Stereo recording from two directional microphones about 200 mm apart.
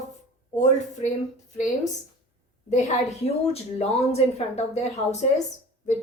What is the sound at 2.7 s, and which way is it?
Speech, 35° left (ahead or behind).